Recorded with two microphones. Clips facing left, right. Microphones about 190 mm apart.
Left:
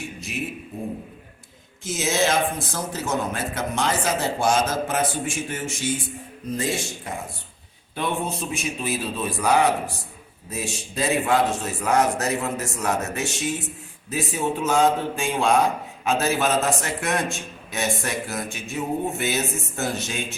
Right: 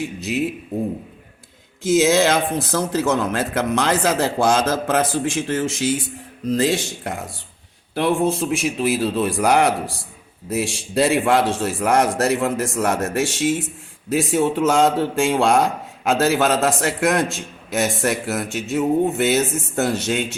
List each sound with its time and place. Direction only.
1.9 s speech: 85° right
6.5 s speech: 75° right (ahead or behind)
7.9 s speech: 85° right
17.7 s speech: 75° right (ahead or behind)